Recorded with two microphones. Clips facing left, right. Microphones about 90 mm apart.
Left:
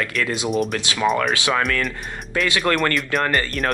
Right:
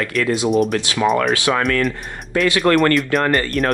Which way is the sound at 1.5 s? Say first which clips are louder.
Right 4 dB; 40° right (ahead or behind).